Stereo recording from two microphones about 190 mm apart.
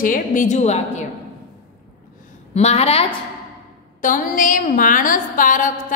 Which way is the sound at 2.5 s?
35° left (ahead or behind).